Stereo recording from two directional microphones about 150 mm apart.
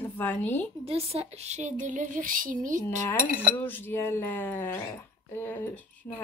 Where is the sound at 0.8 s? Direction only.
40° right (ahead or behind); by 2.8 s 60° right (ahead or behind).